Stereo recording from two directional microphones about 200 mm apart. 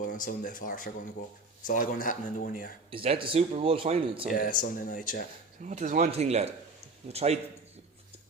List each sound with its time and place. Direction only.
0.0 s speech: 40° left (ahead or behind)
2.9 s speech: 25° right (ahead or behind)
4.3 s speech: 40° left (ahead or behind)
5.6 s speech: 40° right (ahead or behind)